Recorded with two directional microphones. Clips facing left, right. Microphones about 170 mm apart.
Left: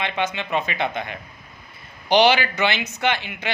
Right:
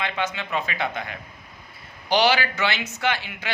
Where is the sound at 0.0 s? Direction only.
20° left (ahead or behind).